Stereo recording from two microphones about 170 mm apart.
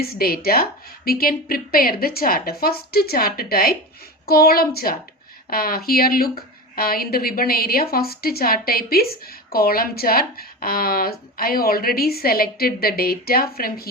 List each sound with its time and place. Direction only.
0.0 s a woman's voice: 60° left (ahead or behind)